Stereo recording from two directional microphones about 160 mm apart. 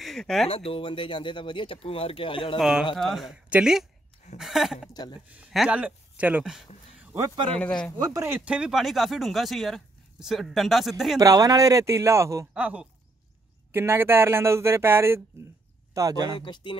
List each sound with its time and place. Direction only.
0.0 s speech: centre (ahead or behind)
0.5 s speech: 35° left (ahead or behind)
3.0 s speech: centre (ahead or behind)
4.9 s speech: 25° left (ahead or behind)
5.3 s speech: 5° right (ahead or behind)
7.2 s speech: 20° right (ahead or behind)
7.5 s speech: 5° left (ahead or behind)
8.0 s speech: 20° right (ahead or behind)
8.5 s speech: 5° right (ahead or behind)
11.1 s speech: 20° right (ahead or behind)
12.5 s speech: 10° right (ahead or behind); by 16.3 s 25° right (ahead or behind)
16.3 s speech: 30° left (ahead or behind)